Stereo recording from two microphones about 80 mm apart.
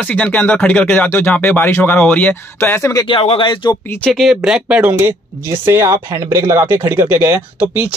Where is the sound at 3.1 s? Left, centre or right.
Left.